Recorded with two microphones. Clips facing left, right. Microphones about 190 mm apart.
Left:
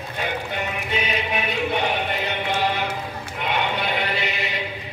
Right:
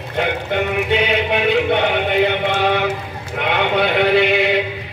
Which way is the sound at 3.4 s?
65° right (ahead or behind).